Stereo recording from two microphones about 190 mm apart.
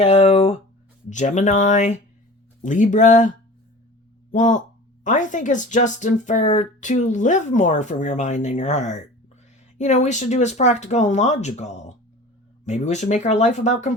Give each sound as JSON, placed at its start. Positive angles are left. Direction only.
{"t": 0.0, "sound": "speech", "side_deg": 30}